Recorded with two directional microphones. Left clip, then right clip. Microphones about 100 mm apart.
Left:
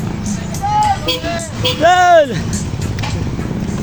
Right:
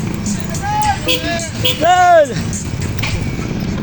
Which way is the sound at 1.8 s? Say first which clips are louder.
Left 1 dB; 75° left (ahead or behind).